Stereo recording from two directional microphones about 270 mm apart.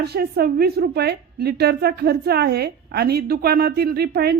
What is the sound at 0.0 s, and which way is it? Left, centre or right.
A woman's voice, right.